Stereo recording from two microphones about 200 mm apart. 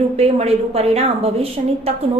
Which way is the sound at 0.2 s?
30° right (ahead or behind).